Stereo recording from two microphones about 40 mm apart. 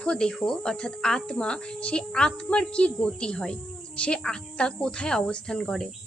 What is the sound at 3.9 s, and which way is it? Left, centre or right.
A woman's voice, left.